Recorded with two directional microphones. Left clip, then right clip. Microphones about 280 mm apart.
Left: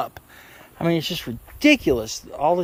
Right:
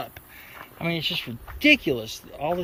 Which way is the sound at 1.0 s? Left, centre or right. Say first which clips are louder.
Right 1 dB; left.